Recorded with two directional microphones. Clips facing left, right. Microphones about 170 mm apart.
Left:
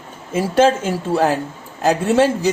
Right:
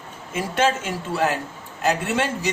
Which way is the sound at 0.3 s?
35° left (ahead or behind).